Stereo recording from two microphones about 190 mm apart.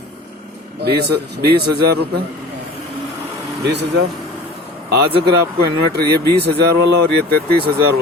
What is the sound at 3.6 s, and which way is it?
Speech, 60° right (ahead or behind).